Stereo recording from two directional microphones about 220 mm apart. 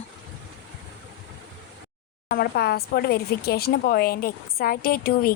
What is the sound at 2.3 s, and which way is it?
A woman's voice, 45° left (ahead or behind).